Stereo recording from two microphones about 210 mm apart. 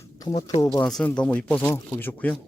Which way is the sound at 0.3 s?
15° left (ahead or behind).